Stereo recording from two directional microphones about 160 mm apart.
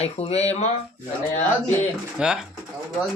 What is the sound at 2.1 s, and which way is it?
Speech, 5° right (ahead or behind).